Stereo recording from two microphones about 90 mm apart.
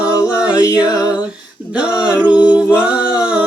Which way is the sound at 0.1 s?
40° left (ahead or behind).